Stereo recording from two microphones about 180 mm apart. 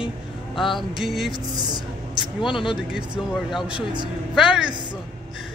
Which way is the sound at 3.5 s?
5° right (ahead or behind).